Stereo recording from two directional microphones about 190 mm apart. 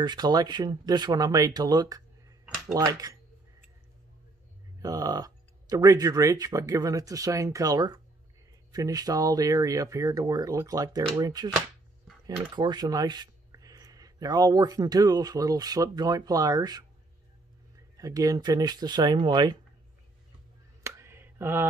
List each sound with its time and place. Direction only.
0.0 s speech: 20° right (ahead or behind)
4.8 s speech: 20° right (ahead or behind)
12.5 s speech: 20° right (ahead or behind)
17.9 s speech: 20° right (ahead or behind)
20.8 s a sound: 15° right (ahead or behind)